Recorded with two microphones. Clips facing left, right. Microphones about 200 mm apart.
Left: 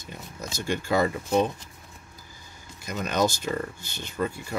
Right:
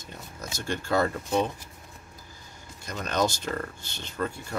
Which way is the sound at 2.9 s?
10° left (ahead or behind).